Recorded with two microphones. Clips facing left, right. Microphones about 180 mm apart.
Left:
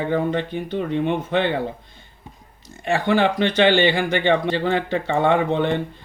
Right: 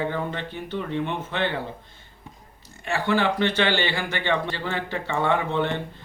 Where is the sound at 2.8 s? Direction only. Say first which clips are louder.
Left 4 dB; 20° left (ahead or behind).